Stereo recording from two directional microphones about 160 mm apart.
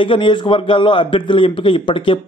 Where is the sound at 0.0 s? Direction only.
30° left (ahead or behind).